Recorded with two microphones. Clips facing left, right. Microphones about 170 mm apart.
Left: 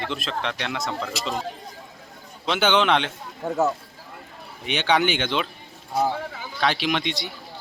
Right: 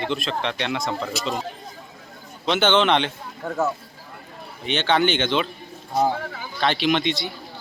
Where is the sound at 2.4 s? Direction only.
5° left (ahead or behind).